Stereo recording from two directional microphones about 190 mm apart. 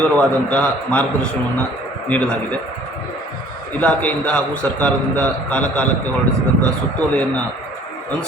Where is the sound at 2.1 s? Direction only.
5° left (ahead or behind).